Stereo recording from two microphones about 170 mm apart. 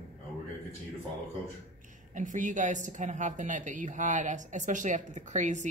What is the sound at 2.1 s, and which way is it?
Speech, 50° right (ahead or behind).